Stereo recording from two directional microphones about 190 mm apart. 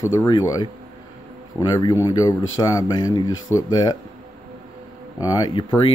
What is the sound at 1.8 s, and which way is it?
Speech, 20° left (ahead or behind).